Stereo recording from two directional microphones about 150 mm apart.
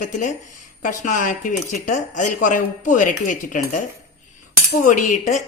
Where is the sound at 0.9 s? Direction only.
55° left (ahead or behind).